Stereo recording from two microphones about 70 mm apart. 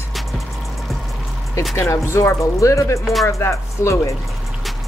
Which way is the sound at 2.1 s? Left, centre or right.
Left.